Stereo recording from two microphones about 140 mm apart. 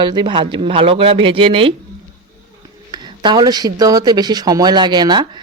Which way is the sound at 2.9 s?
30° right (ahead or behind).